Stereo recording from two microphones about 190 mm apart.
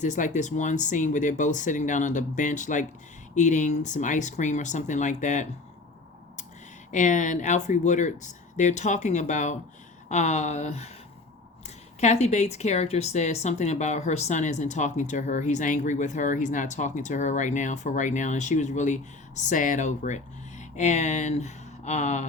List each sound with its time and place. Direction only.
0.0 s speech: 40° left (ahead or behind)
6.9 s speech: 40° left (ahead or behind)